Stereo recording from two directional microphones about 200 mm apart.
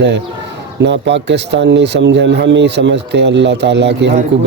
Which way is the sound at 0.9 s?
60° right (ahead or behind).